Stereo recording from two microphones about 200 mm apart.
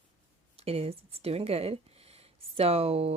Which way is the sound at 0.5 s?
30° right (ahead or behind).